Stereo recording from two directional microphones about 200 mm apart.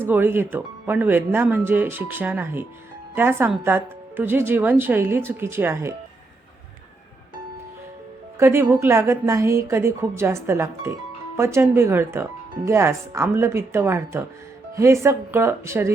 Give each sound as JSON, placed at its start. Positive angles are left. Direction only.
{"t": 0.0, "sound": "speech", "side_deg": -10}
{"t": 8.4, "sound": "speech", "side_deg": -10}